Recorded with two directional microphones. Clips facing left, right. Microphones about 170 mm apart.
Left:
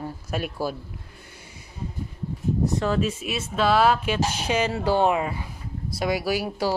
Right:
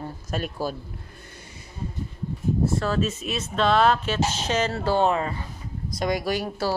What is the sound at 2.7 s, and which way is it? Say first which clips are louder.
Speech: left 1 dB; 15° left (ahead or behind).